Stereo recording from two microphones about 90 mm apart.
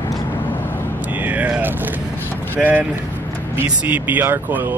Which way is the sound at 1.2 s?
15° right (ahead or behind).